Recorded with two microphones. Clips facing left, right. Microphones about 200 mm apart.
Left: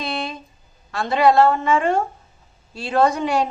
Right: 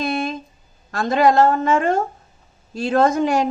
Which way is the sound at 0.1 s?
45° right (ahead or behind).